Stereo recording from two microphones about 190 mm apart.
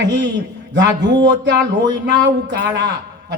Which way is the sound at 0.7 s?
65° right (ahead or behind).